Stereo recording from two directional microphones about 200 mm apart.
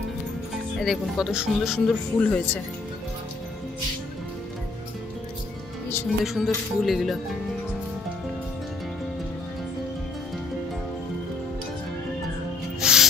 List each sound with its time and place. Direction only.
0.7 s speech: centre (ahead or behind)
6.2 s speech: centre (ahead or behind)
12.8 s music: 5° right (ahead or behind)